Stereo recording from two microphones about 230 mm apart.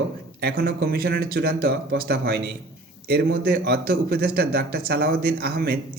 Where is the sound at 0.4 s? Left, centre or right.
Right.